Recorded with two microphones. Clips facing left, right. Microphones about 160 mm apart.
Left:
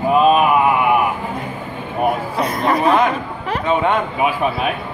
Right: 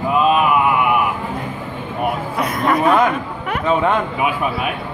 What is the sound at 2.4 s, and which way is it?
Speech, 30° left (ahead or behind).